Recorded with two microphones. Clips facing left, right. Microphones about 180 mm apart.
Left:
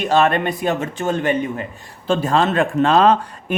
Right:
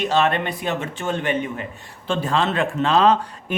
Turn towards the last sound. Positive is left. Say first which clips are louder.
# left 3 dB
turn(degrees=50)  # may be behind; listen again after turning